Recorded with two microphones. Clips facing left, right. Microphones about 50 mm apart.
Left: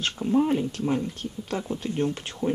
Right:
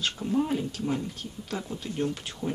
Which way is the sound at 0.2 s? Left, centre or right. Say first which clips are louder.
Left 6 dB; centre.